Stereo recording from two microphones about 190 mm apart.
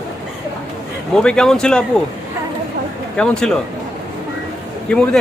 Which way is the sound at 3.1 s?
5° left (ahead or behind).